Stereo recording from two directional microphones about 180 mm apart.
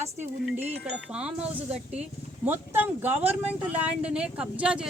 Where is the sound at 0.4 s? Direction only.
10° right (ahead or behind).